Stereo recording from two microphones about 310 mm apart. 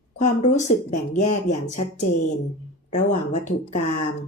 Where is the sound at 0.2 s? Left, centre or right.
Left.